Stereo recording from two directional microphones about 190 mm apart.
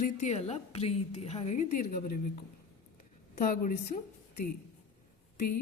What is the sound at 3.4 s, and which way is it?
Speech, 45° left (ahead or behind).